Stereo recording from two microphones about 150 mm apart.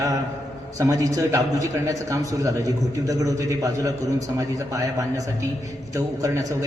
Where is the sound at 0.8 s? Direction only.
20° right (ahead or behind).